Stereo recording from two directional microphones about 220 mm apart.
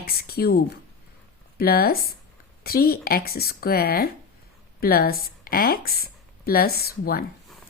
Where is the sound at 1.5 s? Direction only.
45° left (ahead or behind).